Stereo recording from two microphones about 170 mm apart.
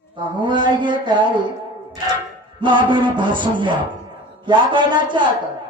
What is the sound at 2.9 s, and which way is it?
A man's voice, 30° right (ahead or behind).